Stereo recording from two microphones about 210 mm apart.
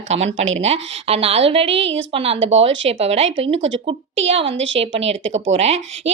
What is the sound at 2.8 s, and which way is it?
Speech, 30° right (ahead or behind).